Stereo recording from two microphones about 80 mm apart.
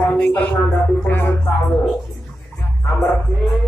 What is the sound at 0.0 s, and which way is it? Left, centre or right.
Speech, centre.